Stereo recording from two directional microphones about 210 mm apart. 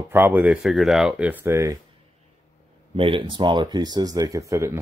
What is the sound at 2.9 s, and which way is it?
Speech, 25° right (ahead or behind).